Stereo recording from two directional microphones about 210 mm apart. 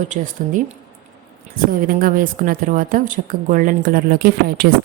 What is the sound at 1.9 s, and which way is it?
A woman's voice, 40° right (ahead or behind).